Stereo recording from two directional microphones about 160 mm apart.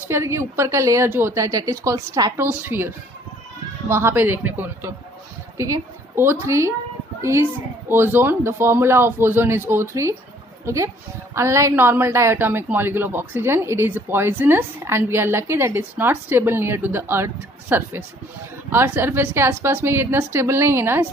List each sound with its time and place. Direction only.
0.0 s a woman's voice: 15° right (ahead or behind)
3.9 s a woman's voice: 15° right (ahead or behind)